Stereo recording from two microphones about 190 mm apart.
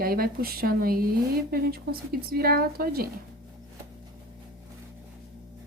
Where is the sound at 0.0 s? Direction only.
50° right (ahead or behind).